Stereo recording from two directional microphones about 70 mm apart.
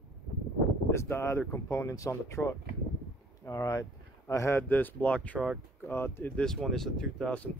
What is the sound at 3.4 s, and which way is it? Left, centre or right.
Speech, left.